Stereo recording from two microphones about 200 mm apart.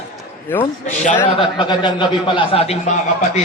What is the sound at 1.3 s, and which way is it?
A man's voice, 25° left (ahead or behind).